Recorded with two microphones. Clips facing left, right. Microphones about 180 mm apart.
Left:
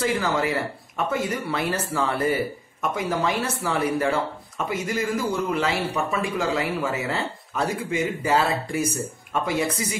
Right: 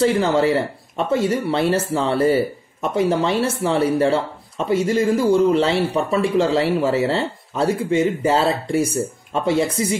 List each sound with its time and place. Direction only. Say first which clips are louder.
0.0 s speech: right 7 dB; 30° right (ahead or behind)